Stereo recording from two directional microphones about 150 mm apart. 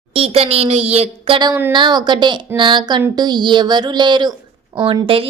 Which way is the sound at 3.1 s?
30° right (ahead or behind).